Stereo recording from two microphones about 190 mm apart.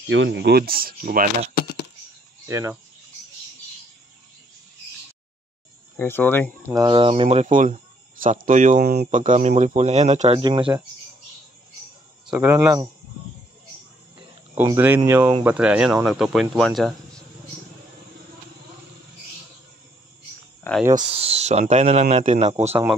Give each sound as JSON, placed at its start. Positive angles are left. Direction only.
{"t": 0.1, "sound": "speech", "side_deg": -70}
{"t": 1.6, "sound": "a sound", "side_deg": 55}
{"t": 2.4, "sound": "speech", "side_deg": -15}
{"t": 5.9, "sound": "speech", "side_deg": 10}
{"t": 6.8, "sound": "speech", "side_deg": -25}
{"t": 8.8, "sound": "speech", "side_deg": -60}
{"t": 9.1, "sound": "speech", "side_deg": -40}
{"t": 10.4, "sound": "speech", "side_deg": -25}
{"t": 12.3, "sound": "speech", "side_deg": -15}
{"t": 15.0, "sound": "speech", "side_deg": -15}
{"t": 20.7, "sound": "speech", "side_deg": 10}
{"t": 21.1, "sound": "speech", "side_deg": -30}